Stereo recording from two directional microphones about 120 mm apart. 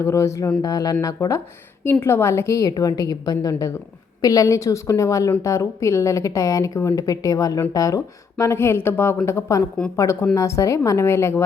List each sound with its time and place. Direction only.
0.0 s speech: 25° left (ahead or behind)